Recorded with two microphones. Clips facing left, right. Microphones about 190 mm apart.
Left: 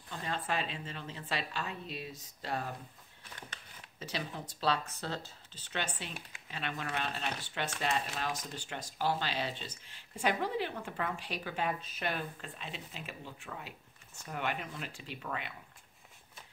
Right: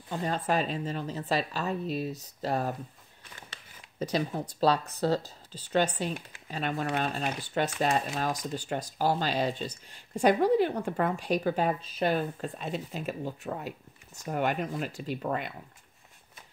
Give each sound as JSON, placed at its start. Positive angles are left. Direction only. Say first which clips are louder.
{"t": 0.1, "sound": "speech", "louder": "right 8 dB", "side_deg": -40}
{"t": 4.0, "sound": "speech", "louder": "right 10 dB", "side_deg": -40}